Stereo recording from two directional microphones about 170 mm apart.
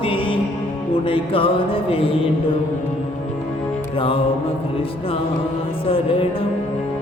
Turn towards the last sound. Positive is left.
turn(degrees=30)  # may be behind; listen again after turning